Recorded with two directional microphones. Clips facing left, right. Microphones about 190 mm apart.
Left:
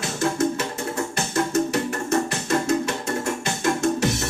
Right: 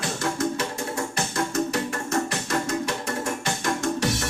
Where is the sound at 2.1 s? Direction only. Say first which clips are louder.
Left 4 dB; 25° left (ahead or behind).